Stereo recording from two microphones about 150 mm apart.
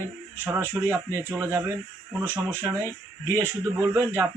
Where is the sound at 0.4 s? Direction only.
15° right (ahead or behind).